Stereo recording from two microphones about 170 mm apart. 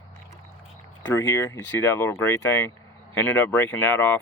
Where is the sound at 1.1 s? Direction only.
15° left (ahead or behind).